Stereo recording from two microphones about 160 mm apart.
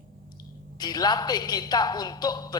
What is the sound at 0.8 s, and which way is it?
Speech, 25° left (ahead or behind).